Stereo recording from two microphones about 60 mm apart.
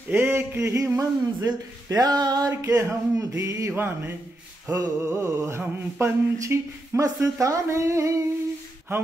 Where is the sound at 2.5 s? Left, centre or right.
Right.